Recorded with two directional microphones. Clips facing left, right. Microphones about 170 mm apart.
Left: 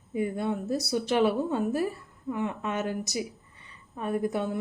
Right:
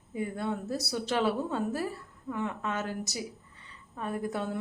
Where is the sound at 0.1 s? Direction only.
15° left (ahead or behind).